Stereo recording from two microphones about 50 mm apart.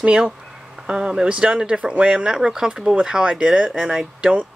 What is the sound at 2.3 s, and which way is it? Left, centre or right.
Speech, centre.